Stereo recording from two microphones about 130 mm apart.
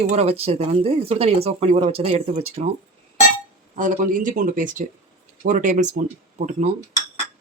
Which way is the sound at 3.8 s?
90° right.